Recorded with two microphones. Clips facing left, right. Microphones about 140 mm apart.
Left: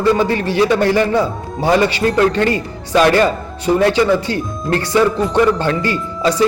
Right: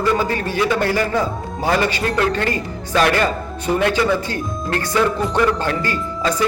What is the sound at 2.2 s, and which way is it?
Speech, 30° left (ahead or behind).